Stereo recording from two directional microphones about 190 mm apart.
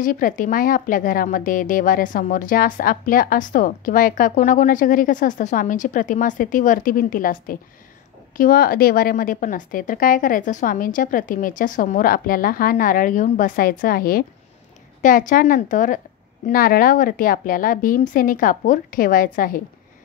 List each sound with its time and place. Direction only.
0.0 s speech: 45° left (ahead or behind)